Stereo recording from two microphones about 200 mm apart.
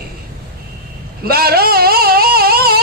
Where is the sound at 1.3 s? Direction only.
50° right (ahead or behind).